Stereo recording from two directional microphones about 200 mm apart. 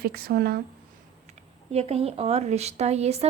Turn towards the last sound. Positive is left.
turn(degrees=-30)  # may be behind; listen again after turning